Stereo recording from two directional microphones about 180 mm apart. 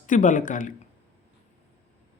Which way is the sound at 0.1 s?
45° left (ahead or behind).